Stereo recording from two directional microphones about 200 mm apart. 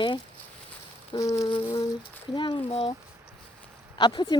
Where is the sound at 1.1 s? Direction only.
15° left (ahead or behind).